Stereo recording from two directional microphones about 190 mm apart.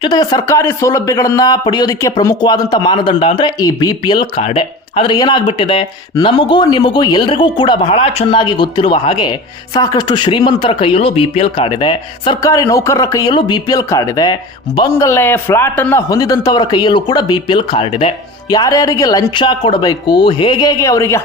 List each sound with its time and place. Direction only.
0.0 s speech: 20° left (ahead or behind)
18.5 s speech: 20° left (ahead or behind)